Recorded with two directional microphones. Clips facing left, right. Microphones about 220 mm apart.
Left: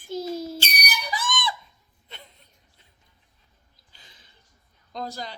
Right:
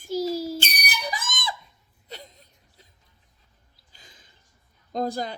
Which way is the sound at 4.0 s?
45° right (ahead or behind).